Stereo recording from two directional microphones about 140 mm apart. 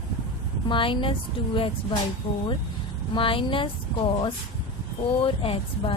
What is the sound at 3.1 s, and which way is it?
A woman's voice, 40° left (ahead or behind).